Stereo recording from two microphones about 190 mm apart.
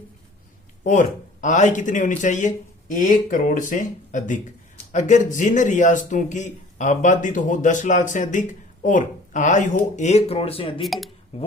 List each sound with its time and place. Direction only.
0.9 s a man's voice: 40° left (ahead or behind)
10.8 s speech: centre (ahead or behind)
11.3 s a man's voice: 30° left (ahead or behind)